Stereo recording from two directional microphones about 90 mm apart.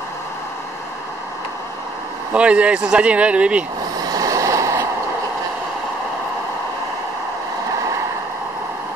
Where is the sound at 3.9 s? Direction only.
45° right (ahead or behind).